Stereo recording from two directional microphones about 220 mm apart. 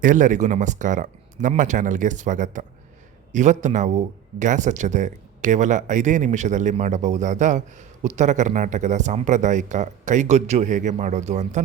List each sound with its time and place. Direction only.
0.0 s speech: 35° right (ahead or behind)